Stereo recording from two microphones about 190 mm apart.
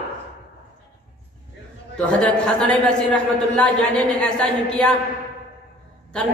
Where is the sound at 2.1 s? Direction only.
5° left (ahead or behind).